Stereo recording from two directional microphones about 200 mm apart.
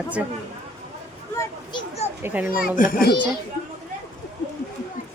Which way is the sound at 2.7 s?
45° left (ahead or behind).